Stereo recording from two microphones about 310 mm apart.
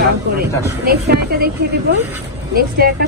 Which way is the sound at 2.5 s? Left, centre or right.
Right.